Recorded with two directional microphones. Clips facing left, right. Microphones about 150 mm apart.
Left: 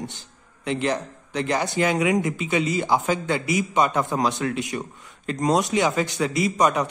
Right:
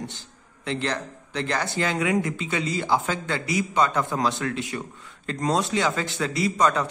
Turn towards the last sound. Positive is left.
turn(degrees=20)  # may be behind; listen again after turning